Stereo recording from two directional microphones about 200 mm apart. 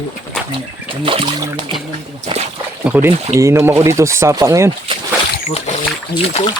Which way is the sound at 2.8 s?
10° right (ahead or behind).